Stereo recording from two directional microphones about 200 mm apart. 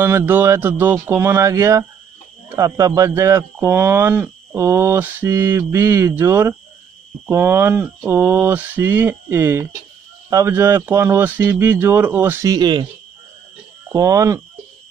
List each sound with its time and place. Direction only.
0.0 s speech: 10° right (ahead or behind)
13.9 s speech: 15° right (ahead or behind)